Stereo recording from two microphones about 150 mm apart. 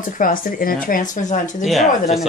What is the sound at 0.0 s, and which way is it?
Speech, 65° left (ahead or behind).